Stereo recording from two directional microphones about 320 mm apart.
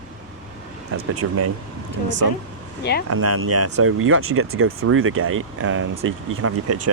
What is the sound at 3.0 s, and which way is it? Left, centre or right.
Speech, right.